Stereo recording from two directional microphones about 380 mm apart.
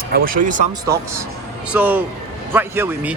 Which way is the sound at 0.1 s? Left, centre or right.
Right.